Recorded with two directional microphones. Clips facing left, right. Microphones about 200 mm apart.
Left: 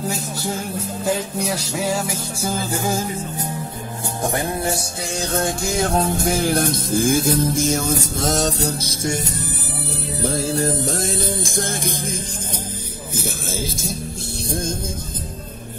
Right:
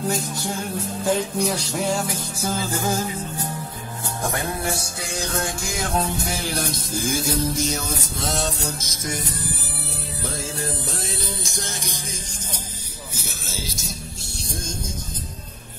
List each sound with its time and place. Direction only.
1.0 s music: 5° left (ahead or behind)
4.2 s music: 30° left (ahead or behind)
10.2 s music: 40° left (ahead or behind); by 14.8 s 55° left (ahead or behind)